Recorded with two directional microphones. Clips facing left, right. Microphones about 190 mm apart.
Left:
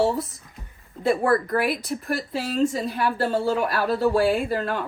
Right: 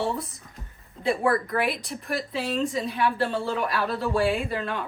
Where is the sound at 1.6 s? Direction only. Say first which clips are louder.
Left 3 dB; centre (ahead or behind).